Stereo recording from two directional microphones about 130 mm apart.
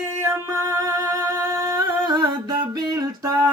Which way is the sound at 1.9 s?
35° right (ahead or behind).